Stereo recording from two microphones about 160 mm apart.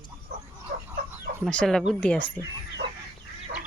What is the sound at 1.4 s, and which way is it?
Speech, 5° left (ahead or behind).